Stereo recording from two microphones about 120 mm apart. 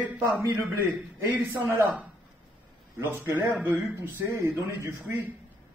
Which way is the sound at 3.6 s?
15° right (ahead or behind).